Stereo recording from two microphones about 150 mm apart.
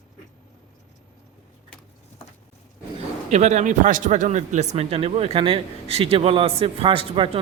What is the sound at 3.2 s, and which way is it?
Speech, 50° right (ahead or behind).